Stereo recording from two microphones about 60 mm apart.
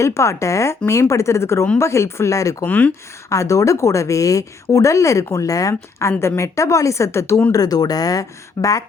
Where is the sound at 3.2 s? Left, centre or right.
Left.